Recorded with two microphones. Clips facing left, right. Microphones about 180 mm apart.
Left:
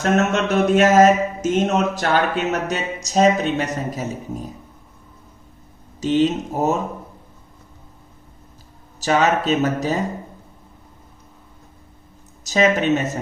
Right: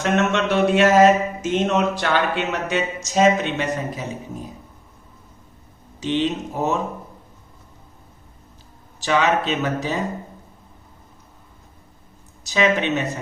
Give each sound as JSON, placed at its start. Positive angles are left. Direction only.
{"t": 0.0, "sound": "speech", "side_deg": 40}
{"t": 6.0, "sound": "speech", "side_deg": 40}
{"t": 9.0, "sound": "speech", "side_deg": 40}
{"t": 12.5, "sound": "speech", "side_deg": 45}